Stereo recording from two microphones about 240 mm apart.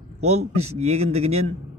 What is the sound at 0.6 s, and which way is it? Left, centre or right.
Speech, right.